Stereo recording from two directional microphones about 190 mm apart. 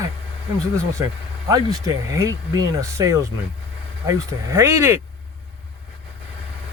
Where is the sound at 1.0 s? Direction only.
15° right (ahead or behind).